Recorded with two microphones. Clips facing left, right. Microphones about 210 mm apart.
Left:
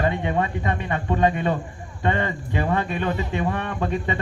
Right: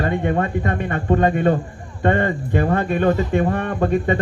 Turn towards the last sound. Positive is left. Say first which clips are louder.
# right 7 dB
turn(degrees=-50)  # may be behind; listen again after turning